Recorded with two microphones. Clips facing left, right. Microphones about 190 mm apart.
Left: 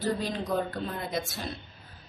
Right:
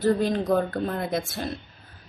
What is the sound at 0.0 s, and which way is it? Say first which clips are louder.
Speech: right 8 dB; 55° right (ahead or behind).